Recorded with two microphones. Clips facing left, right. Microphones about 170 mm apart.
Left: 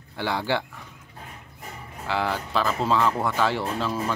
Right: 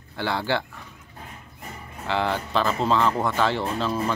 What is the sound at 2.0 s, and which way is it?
Speech, 5° left (ahead or behind).